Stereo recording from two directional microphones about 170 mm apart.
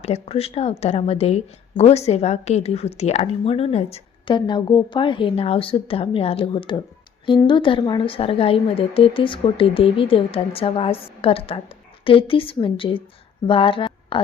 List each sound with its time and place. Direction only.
0.0 s a woman's voice: 35° left (ahead or behind)